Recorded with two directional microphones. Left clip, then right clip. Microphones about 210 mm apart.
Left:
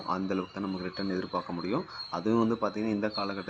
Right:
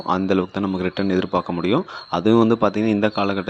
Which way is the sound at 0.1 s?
40° right (ahead or behind).